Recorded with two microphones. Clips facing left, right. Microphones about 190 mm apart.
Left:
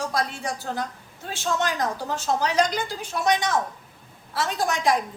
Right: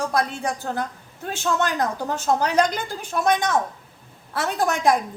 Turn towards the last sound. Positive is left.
turn(degrees=-55)  # may be behind; listen again after turning